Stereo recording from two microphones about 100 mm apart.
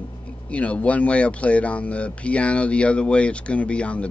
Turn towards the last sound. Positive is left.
turn(degrees=10)  # may be behind; listen again after turning